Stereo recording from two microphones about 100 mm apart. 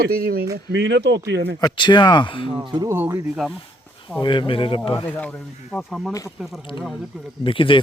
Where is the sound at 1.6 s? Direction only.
50° left (ahead or behind).